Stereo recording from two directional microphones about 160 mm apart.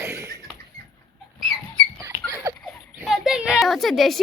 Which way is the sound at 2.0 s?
20° right (ahead or behind).